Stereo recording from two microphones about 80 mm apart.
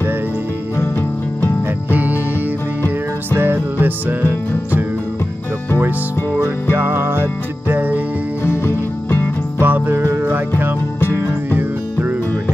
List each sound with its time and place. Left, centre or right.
1.9 s music: right
3.3 s music: right
6.7 s music: right
8.5 s music: left
9.6 s music: right